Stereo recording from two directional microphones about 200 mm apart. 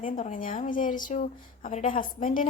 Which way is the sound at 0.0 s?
40° left (ahead or behind).